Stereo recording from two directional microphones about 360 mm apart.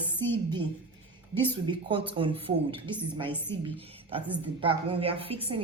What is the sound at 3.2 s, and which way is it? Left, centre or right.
Speech, centre.